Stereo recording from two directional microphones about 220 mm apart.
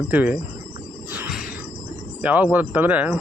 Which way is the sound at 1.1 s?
5° right (ahead or behind).